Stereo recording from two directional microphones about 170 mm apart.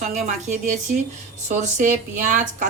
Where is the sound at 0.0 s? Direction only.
45° right (ahead or behind).